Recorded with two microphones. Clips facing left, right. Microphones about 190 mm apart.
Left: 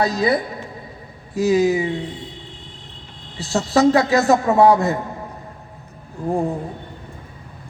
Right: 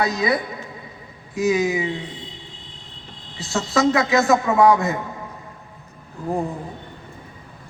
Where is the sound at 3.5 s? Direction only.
35° left (ahead or behind).